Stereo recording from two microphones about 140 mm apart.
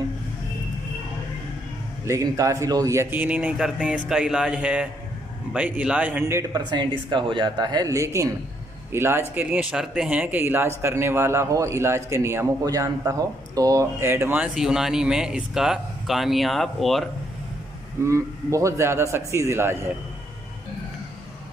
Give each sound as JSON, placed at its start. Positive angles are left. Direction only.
{"t": 2.0, "sound": "a man's voice", "side_deg": -20}
{"t": 6.5, "sound": "a man's voice", "side_deg": -35}
{"t": 18.0, "sound": "a man's voice", "side_deg": -20}